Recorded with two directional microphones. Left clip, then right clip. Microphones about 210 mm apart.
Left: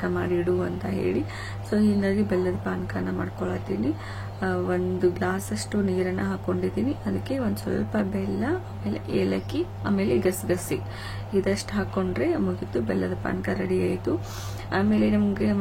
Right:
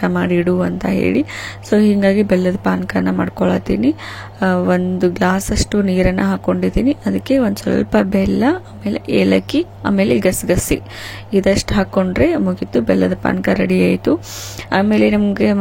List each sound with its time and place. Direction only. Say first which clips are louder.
0.0 s a woman's voice: right 9 dB; 35° right (ahead or behind)